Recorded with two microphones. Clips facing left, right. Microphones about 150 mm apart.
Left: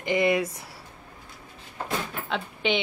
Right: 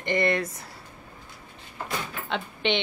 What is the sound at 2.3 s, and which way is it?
Speech, 5° left (ahead or behind).